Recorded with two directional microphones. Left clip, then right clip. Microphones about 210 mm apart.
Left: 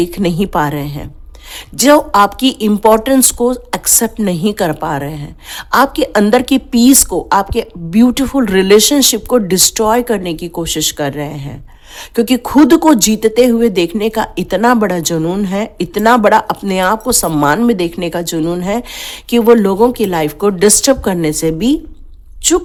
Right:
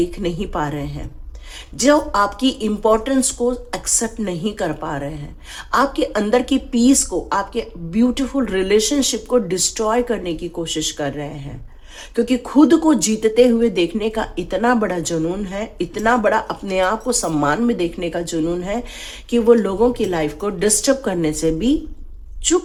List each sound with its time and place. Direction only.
0.0 s a woman's voice: 50° left (ahead or behind)